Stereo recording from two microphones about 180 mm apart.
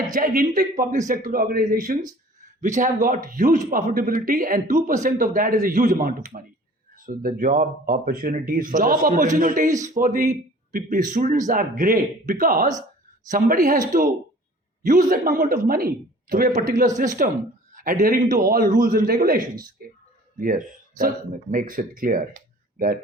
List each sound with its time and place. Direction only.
0.1 s speech: 50° right (ahead or behind)
2.4 s speech: 45° right (ahead or behind)